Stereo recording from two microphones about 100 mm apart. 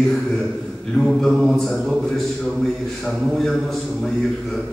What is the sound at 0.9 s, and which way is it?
A man's voice, centre (ahead or behind).